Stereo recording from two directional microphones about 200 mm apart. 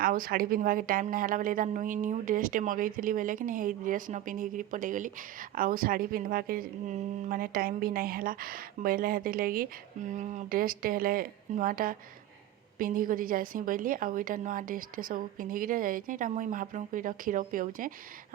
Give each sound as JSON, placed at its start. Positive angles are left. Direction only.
{"t": 0.0, "sound": "speech", "side_deg": -45}